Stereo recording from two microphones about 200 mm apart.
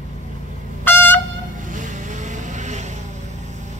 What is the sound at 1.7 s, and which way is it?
Vehicle, 40° right (ahead or behind).